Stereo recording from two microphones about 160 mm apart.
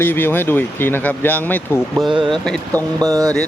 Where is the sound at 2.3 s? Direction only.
5° left (ahead or behind).